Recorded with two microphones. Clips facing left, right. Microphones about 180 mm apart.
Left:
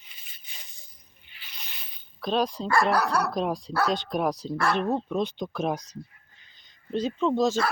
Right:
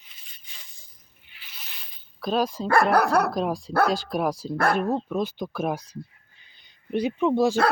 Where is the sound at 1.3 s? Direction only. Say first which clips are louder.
Left 1 dB; 5° right (ahead or behind).